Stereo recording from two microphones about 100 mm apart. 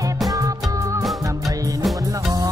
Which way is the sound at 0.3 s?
35° right (ahead or behind).